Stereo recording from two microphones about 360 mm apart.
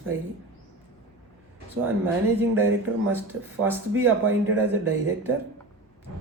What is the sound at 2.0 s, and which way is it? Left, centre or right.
Speech, centre.